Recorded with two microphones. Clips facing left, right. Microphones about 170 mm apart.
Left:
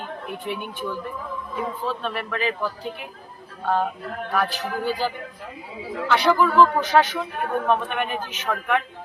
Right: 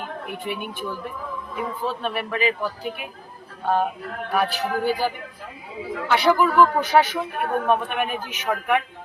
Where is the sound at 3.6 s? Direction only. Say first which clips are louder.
Right 1 dB; 15° right (ahead or behind).